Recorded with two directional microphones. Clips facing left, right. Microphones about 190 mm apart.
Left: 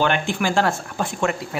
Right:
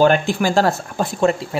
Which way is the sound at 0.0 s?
40° right (ahead or behind).